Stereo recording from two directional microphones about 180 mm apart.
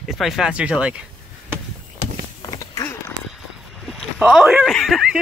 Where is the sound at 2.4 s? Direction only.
20° left (ahead or behind).